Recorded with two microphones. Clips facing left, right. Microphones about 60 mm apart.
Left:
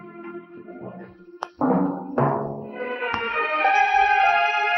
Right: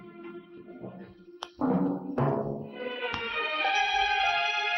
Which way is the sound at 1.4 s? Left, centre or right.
Left.